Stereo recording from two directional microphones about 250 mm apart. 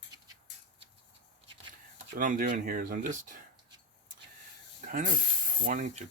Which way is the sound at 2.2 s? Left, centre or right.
Right.